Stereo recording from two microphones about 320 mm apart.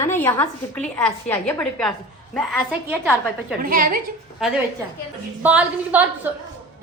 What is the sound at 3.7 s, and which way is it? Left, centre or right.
Speech, right.